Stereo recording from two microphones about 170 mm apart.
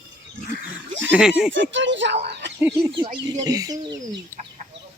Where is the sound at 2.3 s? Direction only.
90° right.